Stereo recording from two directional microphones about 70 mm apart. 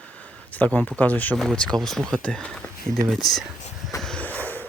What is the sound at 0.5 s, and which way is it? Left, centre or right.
Speech, left.